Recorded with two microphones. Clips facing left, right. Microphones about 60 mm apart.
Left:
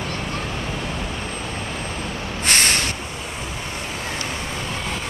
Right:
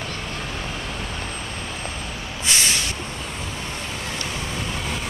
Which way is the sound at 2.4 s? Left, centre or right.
Left.